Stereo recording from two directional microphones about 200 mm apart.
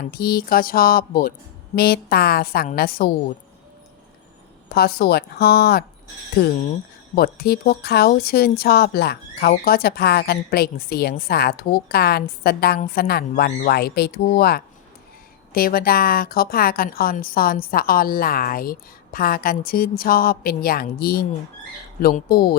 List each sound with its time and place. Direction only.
0.0 s a woman's voice: 50° left (ahead or behind)
4.7 s a woman's voice: 50° left (ahead or behind)